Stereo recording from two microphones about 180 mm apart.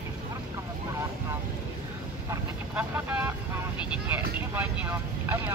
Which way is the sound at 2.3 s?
10° right (ahead or behind).